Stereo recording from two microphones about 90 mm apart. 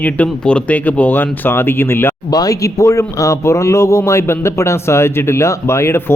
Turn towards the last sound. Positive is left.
turn(degrees=30)  # may be behind; listen again after turning